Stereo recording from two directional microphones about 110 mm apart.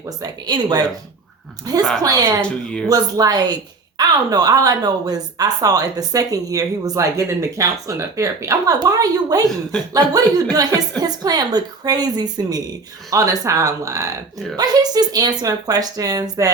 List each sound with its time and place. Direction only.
0.2 s a woman's voice: 40° right (ahead or behind)
2.4 s speech: 10° left (ahead or behind)
2.9 s a woman's voice: 35° right (ahead or behind)